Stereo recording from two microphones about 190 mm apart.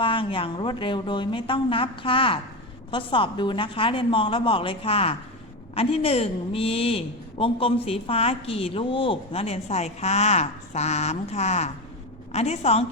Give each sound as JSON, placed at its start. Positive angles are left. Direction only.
{"t": 0.0, "sound": "a woman's voice", "side_deg": 25}